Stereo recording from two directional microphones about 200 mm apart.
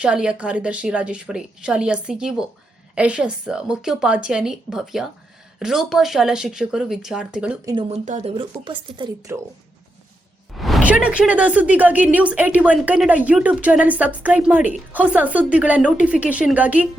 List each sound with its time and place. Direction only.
0.0 s a woman's voice: 5° right (ahead or behind)
7.6 s speech: 15° right (ahead or behind)
7.9 s speech: 35° right (ahead or behind); by 9.4 s 20° right (ahead or behind)
10.6 s speech: centre (ahead or behind)